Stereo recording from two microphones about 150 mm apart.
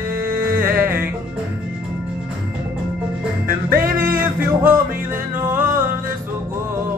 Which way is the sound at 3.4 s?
70° right (ahead or behind).